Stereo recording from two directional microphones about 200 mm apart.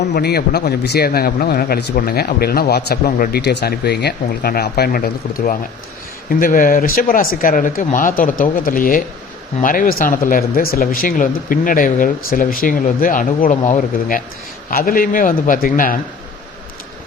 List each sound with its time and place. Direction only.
0.0 s a man's voice: 55° left (ahead or behind); by 14.2 s 35° left (ahead or behind)
14.7 s a man's voice: 50° left (ahead or behind)